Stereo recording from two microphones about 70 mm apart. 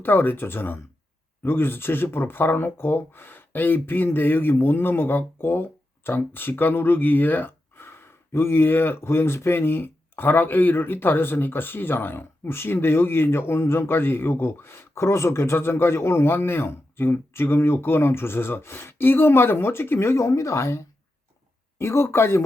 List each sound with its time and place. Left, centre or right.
0.0 s speech: left